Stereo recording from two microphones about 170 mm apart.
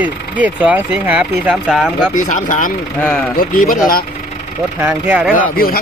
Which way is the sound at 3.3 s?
60° left (ahead or behind).